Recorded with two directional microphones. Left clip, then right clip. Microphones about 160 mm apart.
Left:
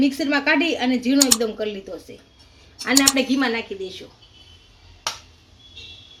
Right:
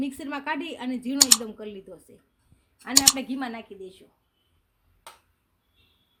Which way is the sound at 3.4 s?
75° right (ahead or behind).